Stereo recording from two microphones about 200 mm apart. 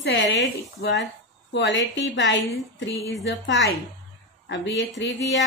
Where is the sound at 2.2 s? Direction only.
65° left (ahead or behind).